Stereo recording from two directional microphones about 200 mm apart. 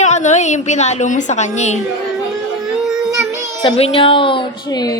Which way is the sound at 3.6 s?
25° left (ahead or behind).